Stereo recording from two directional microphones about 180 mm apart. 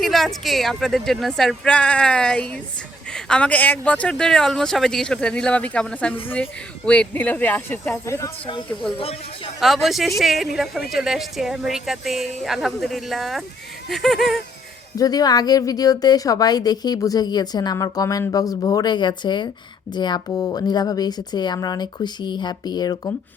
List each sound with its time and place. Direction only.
0.0 s speech: centre (ahead or behind)
9.0 s speech: 30° left (ahead or behind)
9.6 s speech: centre (ahead or behind)
14.9 s a woman's voice: 20° left (ahead or behind)